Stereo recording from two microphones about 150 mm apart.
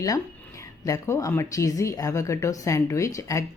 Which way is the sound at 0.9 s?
20° left (ahead or behind).